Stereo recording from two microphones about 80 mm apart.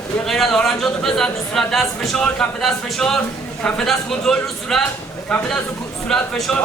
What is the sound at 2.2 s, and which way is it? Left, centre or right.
Speech, centre.